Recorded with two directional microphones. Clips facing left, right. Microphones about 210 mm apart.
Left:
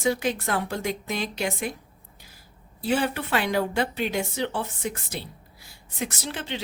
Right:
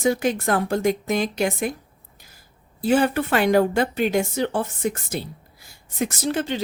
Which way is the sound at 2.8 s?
45° right (ahead or behind).